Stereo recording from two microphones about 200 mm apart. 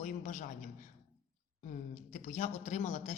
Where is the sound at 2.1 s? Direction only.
35° left (ahead or behind).